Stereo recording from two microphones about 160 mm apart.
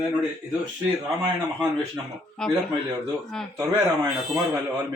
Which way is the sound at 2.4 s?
5° left (ahead or behind).